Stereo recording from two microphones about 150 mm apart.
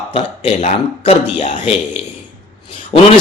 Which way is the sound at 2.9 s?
35° left (ahead or behind).